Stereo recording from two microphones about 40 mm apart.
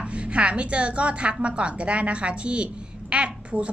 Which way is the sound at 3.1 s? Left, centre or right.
Right.